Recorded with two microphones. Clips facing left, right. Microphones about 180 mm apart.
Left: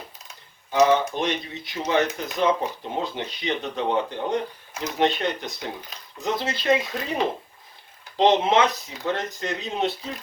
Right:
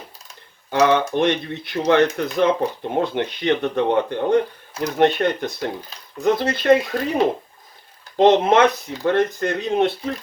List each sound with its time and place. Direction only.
0.7 s speech: 60° right (ahead or behind)
8.1 s speech: 55° right (ahead or behind)